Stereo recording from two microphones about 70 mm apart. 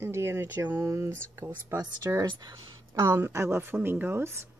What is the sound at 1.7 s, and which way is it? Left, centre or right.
Speech, right.